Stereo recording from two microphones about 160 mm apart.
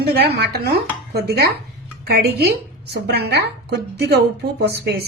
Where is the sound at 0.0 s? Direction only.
90° right.